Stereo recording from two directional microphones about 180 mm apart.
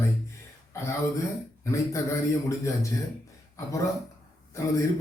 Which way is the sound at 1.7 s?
15° left (ahead or behind).